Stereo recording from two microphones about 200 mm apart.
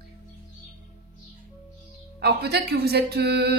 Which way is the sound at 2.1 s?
55° right (ahead or behind).